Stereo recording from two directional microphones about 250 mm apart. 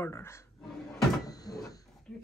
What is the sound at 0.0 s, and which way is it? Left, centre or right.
Speech, centre.